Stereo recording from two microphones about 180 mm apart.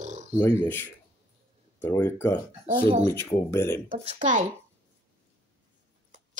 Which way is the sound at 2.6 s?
35° right (ahead or behind).